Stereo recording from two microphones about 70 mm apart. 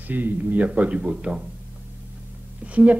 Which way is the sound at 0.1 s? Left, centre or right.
Right.